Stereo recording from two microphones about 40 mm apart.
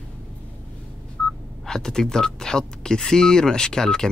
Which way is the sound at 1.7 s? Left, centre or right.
Centre.